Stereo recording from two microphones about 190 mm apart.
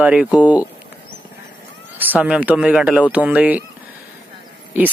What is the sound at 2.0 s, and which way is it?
Speech, 10° right (ahead or behind).